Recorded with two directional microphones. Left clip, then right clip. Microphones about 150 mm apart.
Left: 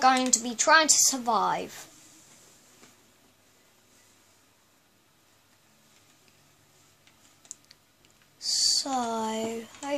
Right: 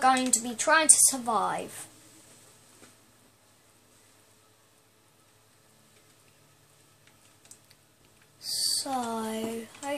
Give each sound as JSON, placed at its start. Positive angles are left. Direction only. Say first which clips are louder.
{"t": 0.0, "sound": "speech", "louder": "left 2 dB", "side_deg": 50}
{"t": 0.6, "sound": "a woman's voice", "louder": "left 3 dB", "side_deg": 40}
{"t": 7.5, "sound": "typing", "louder": "left 10 dB", "side_deg": 50}
{"t": 8.4, "sound": "speech", "louder": "left 5 dB", "side_deg": 50}